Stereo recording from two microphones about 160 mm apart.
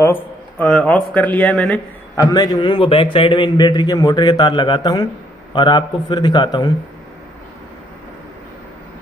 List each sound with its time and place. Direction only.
0.0 s speech: 10° left (ahead or behind)
2.1 s a man's voice: 25° left (ahead or behind)